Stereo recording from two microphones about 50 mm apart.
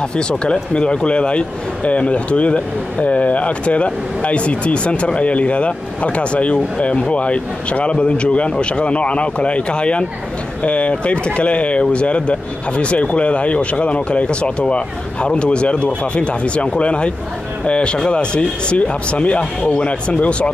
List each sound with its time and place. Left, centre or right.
0.3 s speech: centre